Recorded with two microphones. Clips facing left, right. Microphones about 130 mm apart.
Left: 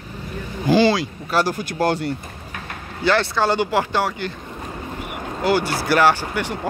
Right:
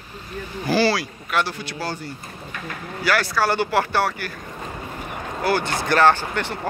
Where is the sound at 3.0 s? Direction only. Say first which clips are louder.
Left 3 dB; 25° left (ahead or behind).